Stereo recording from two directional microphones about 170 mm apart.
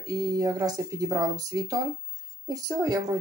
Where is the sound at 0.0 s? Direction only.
20° right (ahead or behind).